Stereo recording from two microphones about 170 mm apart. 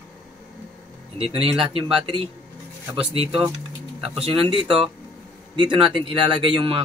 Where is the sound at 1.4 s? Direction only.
30° right (ahead or behind).